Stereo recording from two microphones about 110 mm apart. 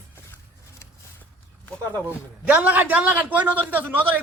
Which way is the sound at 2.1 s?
15° right (ahead or behind).